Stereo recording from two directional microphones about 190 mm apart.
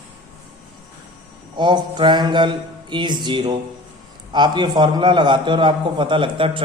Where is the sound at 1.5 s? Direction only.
25° right (ahead or behind).